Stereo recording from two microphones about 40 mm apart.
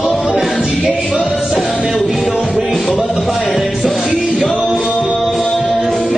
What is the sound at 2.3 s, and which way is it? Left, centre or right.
Music, right.